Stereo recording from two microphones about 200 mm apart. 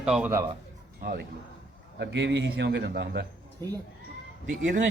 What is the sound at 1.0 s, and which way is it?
Speech, 50° right (ahead or behind).